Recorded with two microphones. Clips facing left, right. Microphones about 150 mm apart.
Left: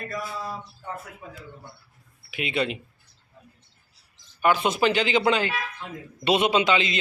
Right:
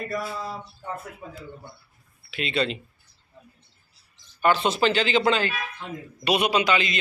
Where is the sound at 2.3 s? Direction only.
15° left (ahead or behind).